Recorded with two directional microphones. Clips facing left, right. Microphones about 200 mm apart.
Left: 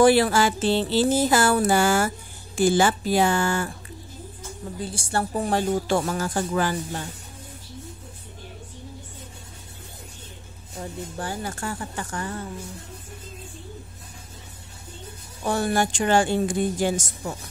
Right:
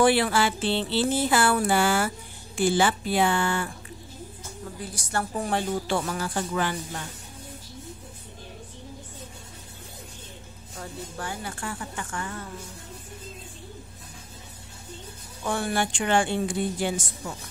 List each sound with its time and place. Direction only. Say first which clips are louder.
0.0 s music: left 4 dB; 40° left (ahead or behind)
4.8 s speech: left 4 dB; 30° left (ahead or behind)
10.8 s music: left 4 dB; 30° left (ahead or behind)
11.4 s speech: left 3 dB; 40° left (ahead or behind)
15.4 s speech: left 4 dB; 40° left (ahead or behind)